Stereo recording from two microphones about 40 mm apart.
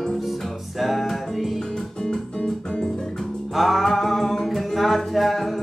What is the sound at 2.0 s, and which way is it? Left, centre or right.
Music, centre.